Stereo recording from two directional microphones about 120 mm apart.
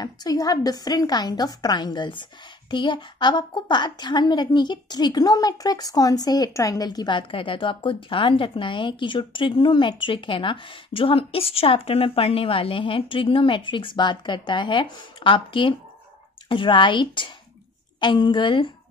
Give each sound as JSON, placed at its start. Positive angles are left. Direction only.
{"t": 0.0, "sound": "a woman's voice", "side_deg": 30}